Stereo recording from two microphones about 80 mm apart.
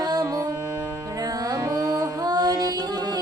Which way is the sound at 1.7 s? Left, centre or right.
Right.